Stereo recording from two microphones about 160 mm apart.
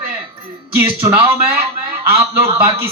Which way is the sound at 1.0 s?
15° right (ahead or behind).